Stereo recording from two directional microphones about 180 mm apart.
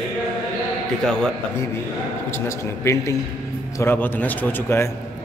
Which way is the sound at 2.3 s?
15° left (ahead or behind).